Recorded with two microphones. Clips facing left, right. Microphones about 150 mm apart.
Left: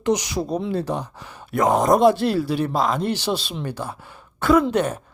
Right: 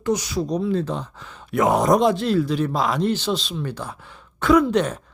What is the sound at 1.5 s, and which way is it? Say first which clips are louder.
Speech: even; centre (ahead or behind).